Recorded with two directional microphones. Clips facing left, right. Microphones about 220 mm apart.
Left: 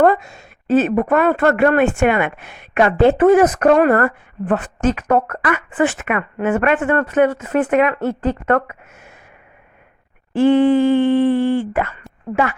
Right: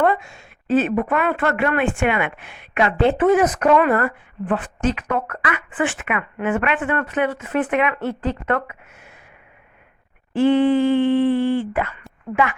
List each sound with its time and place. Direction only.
0.0 s speech: 40° left (ahead or behind)
10.3 s a sound: 45° left (ahead or behind)
12.3 s a woman's voice: 40° left (ahead or behind)